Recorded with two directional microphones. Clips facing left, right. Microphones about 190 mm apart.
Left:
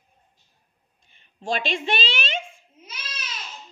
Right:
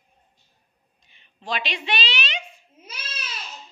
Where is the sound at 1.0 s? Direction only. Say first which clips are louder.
Left 5 dB; 45° left (ahead or behind).